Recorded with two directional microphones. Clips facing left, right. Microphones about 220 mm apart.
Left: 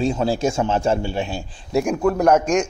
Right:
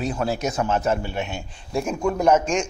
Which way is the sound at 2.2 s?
10° left (ahead or behind).